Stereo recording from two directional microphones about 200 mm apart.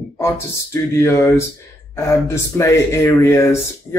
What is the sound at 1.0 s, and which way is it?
A man's voice, 15° left (ahead or behind).